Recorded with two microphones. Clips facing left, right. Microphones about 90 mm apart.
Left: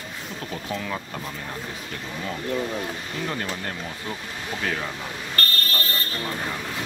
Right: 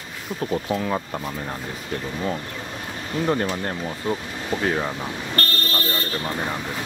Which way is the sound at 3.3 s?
30° right (ahead or behind).